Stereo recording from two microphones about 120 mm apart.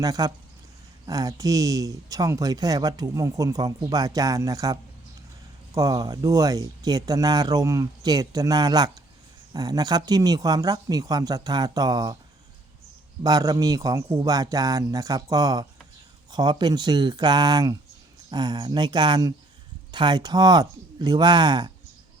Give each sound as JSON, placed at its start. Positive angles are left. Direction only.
{"t": 0.0, "sound": "speech", "side_deg": -30}
{"t": 13.2, "sound": "speech", "side_deg": -30}